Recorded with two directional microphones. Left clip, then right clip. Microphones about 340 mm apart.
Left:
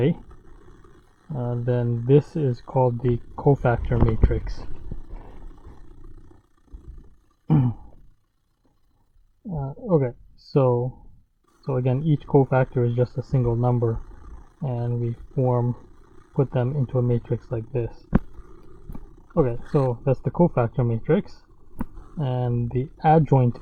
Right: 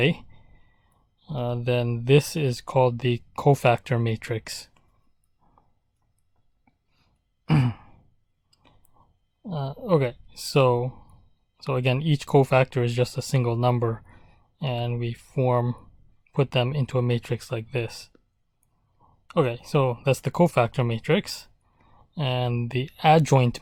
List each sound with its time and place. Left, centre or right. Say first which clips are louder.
1.3 s speech: right 1 dB; right
7.4 s sigh: left 1 dB; right
9.5 s speech: even; right
19.3 s speech: left 1 dB; right